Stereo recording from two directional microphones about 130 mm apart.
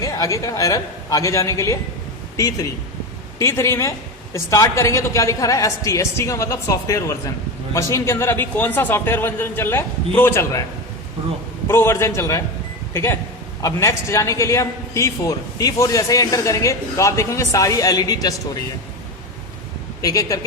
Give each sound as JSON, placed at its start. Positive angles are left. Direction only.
{"t": 0.0, "sound": "a man's voice", "side_deg": 25}
{"t": 11.7, "sound": "a man's voice", "side_deg": 20}
{"t": 20.0, "sound": "a man's voice", "side_deg": 25}